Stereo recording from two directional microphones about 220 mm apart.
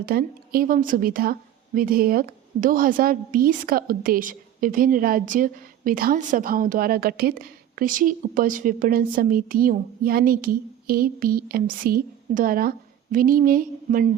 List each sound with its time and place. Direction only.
0.0 s a woman's voice: 45° right (ahead or behind)